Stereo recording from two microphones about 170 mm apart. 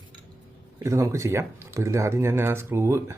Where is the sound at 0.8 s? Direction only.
20° right (ahead or behind).